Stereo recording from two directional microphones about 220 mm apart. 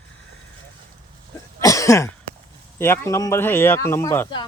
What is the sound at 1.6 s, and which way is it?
Cough, 15° left (ahead or behind).